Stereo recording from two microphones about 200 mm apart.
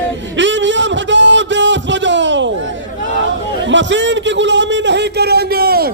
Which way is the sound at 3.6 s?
65° right (ahead or behind).